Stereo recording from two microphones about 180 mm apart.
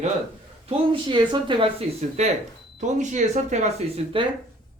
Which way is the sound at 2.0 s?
35° right (ahead or behind).